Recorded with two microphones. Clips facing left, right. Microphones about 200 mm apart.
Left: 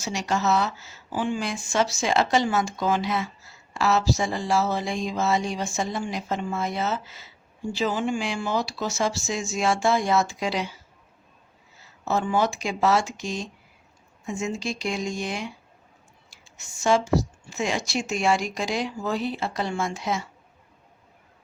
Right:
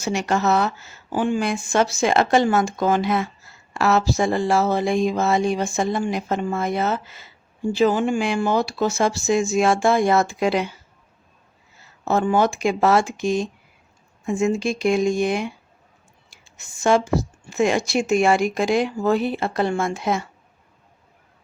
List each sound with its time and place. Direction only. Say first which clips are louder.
0.0 s speech: right 5 dB; 55° right (ahead or behind)
12.0 s speech: right 5 dB; 55° right (ahead or behind)